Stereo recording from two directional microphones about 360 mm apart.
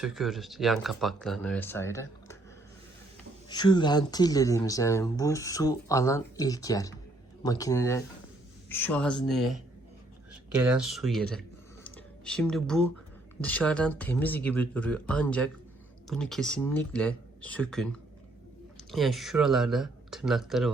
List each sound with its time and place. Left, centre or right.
0.0 s speech: centre
3.5 s speech: centre
18.9 s speech: centre